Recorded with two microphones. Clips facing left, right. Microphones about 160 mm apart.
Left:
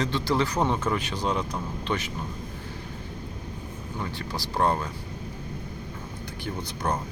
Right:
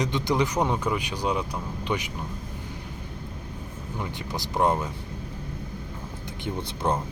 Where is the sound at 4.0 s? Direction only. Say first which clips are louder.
Even; 20° right (ahead or behind).